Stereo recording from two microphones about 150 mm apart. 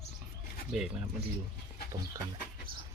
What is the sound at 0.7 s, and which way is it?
Speech, 5° right (ahead or behind).